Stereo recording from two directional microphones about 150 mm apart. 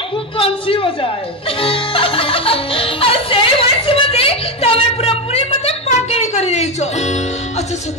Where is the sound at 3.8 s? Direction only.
40° left (ahead or behind).